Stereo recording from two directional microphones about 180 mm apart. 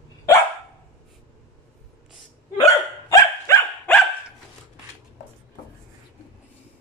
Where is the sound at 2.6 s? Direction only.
15° left (ahead or behind).